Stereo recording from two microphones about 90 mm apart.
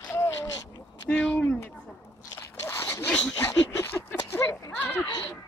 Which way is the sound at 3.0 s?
15° left (ahead or behind).